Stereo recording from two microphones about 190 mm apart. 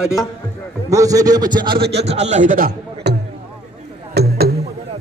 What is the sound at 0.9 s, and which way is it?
Speech, 20° right (ahead or behind).